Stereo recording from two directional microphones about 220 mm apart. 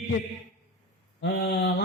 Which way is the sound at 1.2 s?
45° left (ahead or behind).